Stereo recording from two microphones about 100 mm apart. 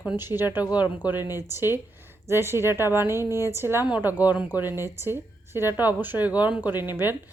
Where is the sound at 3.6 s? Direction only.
25° right (ahead or behind).